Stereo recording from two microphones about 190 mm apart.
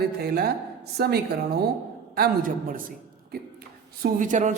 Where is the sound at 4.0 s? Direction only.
45° right (ahead or behind).